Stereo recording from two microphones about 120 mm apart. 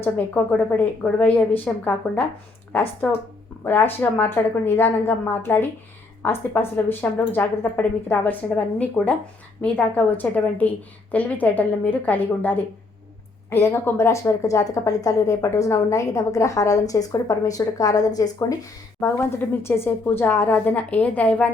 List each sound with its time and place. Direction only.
0.4 s a woman's voice: 10° left (ahead or behind); by 18.7 s 30° left (ahead or behind)
18.9 s a woman's voice: 20° left (ahead or behind)